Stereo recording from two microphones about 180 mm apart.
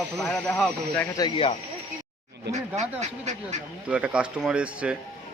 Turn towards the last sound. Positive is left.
turn(degrees=-5)  # may be behind; listen again after turning